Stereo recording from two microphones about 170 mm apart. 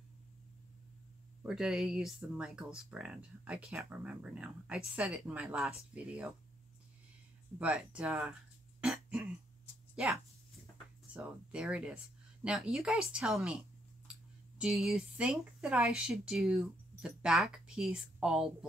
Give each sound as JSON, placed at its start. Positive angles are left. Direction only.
{"t": 1.4, "sound": "speech", "side_deg": -5}
{"t": 7.5, "sound": "speech", "side_deg": -5}
{"t": 8.8, "sound": "throat clearing", "side_deg": -5}
{"t": 10.0, "sound": "speech", "side_deg": -5}
{"t": 11.1, "sound": "speech", "side_deg": -5}
{"t": 14.6, "sound": "speech", "side_deg": 0}